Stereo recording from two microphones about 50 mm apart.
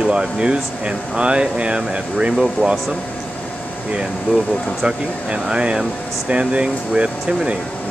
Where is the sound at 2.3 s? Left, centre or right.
Centre.